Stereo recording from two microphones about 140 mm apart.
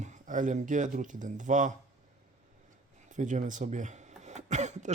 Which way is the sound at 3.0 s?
65° right (ahead or behind).